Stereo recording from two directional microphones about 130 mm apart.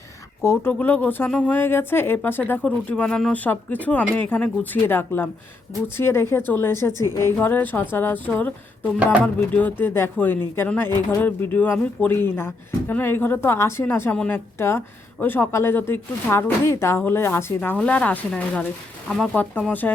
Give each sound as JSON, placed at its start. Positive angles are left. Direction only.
{"t": 0.4, "sound": "speech", "side_deg": 20}